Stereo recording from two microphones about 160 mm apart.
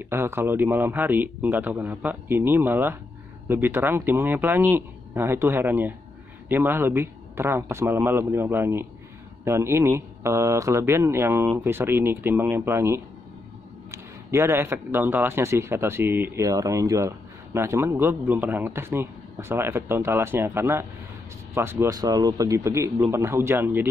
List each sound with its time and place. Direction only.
0.0 s a man's voice: 15° right (ahead or behind)